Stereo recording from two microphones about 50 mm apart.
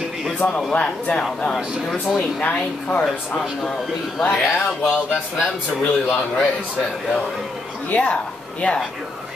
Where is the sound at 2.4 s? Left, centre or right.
Left.